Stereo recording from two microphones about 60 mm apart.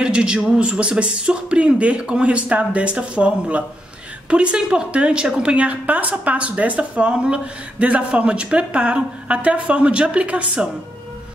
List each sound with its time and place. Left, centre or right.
0.0 s a woman's voice: centre